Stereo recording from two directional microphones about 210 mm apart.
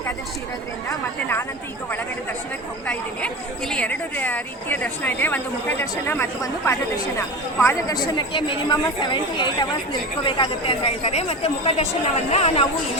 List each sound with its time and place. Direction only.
0.9 s a woman's voice: 10° left (ahead or behind)
2.8 s a woman's voice: 5° left (ahead or behind); by 12.6 s 30° left (ahead or behind)